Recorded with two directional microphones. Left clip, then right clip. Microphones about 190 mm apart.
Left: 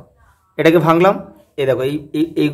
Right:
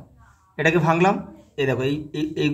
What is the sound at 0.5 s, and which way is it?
A man's voice, 30° left (ahead or behind).